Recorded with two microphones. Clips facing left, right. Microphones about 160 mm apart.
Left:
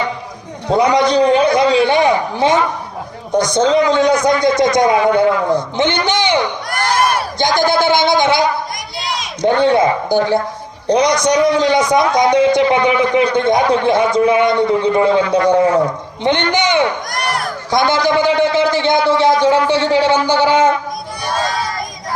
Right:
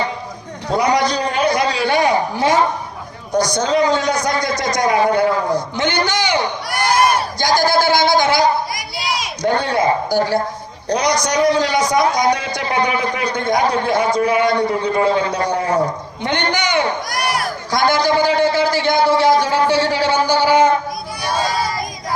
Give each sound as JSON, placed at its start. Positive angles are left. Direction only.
{"t": 0.7, "sound": "a sound", "side_deg": 25}
{"t": 3.3, "sound": "a man's voice", "side_deg": 25}
{"t": 6.7, "sound": "crowd", "side_deg": -10}
{"t": 7.3, "sound": "a man's voice", "side_deg": 25}
{"t": 8.7, "sound": "crowd", "side_deg": -5}
{"t": 9.4, "sound": "a man's voice", "side_deg": 25}
{"t": 16.2, "sound": "a man's voice", "side_deg": 25}
{"t": 17.1, "sound": "crowd", "side_deg": -5}
{"t": 17.7, "sound": "a man's voice", "side_deg": 25}